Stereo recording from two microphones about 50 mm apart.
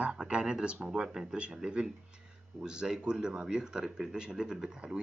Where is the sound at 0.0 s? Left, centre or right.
Right.